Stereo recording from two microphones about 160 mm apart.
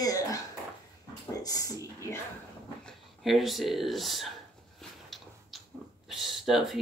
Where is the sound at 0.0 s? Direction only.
20° left (ahead or behind).